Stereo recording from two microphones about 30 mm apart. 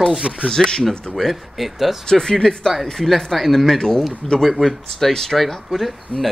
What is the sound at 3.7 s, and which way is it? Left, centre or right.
Speech, left.